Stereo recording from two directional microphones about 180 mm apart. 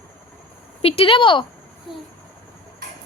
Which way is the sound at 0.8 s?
30° left (ahead or behind).